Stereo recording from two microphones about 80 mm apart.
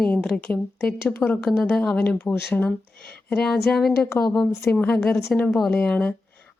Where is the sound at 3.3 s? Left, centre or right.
Centre.